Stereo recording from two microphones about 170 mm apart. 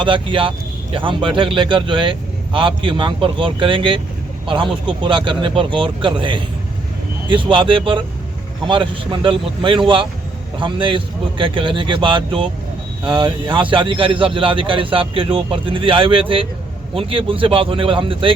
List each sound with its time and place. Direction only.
0.0 s a man's voice: 30° right (ahead or behind)